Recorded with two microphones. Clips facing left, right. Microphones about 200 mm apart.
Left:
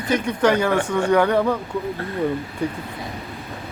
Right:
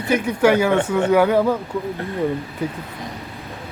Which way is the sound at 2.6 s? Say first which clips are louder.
Left 1 dB; 5° right (ahead or behind).